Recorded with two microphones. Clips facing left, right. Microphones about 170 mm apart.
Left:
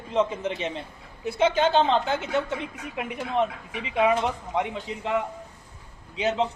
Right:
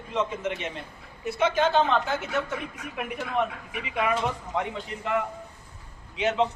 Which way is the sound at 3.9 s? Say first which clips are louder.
Left 5 dB; 25° left (ahead or behind).